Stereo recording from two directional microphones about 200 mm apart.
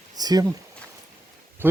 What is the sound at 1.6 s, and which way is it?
Speech, 10° right (ahead or behind).